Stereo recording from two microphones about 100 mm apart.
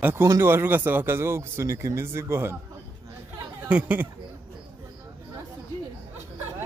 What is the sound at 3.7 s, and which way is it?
Speech, 15° right (ahead or behind).